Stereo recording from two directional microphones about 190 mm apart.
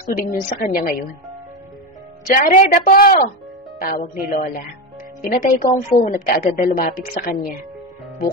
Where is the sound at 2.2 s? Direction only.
40° left (ahead or behind).